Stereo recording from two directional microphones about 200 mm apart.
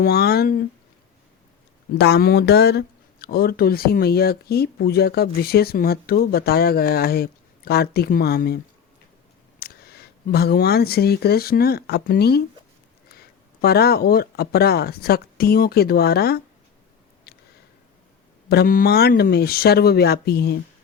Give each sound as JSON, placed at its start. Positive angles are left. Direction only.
{"t": 0.0, "sound": "speech", "side_deg": 50}
{"t": 2.0, "sound": "speech", "side_deg": 55}
{"t": 17.3, "sound": "a sound", "side_deg": 50}
{"t": 18.4, "sound": "speech", "side_deg": 50}